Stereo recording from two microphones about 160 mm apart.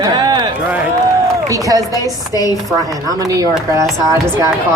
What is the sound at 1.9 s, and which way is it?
Speech, 20° left (ahead or behind).